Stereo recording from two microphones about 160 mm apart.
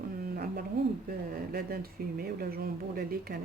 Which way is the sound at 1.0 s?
65° right (ahead or behind).